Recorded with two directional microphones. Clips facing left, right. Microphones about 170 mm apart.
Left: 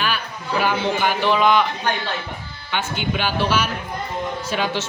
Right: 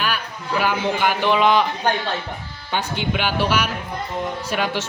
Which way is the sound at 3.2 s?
15° right (ahead or behind).